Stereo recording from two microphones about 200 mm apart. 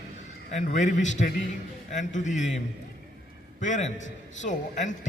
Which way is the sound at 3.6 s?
35° left (ahead or behind).